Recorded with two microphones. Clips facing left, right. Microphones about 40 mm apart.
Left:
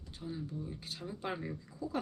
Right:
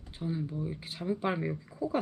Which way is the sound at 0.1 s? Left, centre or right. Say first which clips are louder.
Right 7 dB; right.